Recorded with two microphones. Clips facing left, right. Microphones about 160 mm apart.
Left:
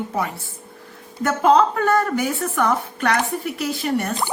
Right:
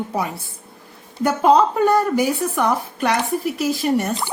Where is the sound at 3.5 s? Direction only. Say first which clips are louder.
Right 3 dB; 25° right (ahead or behind).